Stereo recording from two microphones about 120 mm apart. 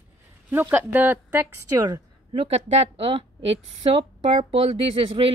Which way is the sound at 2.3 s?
55° right (ahead or behind).